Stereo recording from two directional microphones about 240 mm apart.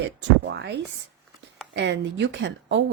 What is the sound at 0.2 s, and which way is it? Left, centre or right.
Speech, right.